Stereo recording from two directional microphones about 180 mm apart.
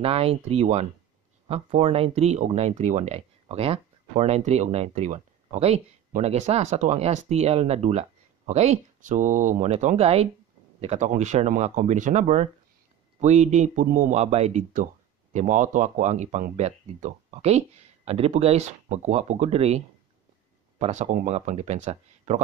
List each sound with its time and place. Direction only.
0.0 s speech: 35° right (ahead or behind)
20.8 s speech: 40° right (ahead or behind)